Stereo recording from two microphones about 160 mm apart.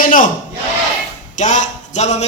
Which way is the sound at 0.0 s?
55° left (ahead or behind).